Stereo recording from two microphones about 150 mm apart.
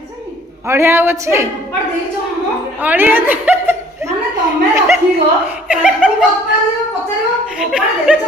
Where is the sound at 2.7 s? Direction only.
10° right (ahead or behind).